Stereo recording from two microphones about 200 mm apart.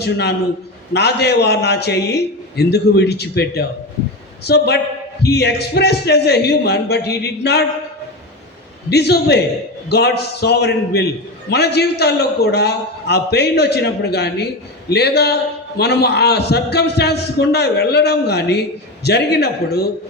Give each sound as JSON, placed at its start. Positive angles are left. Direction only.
{"t": 0.0, "sound": "a man's voice", "side_deg": 55}
{"t": 8.9, "sound": "a man's voice", "side_deg": 55}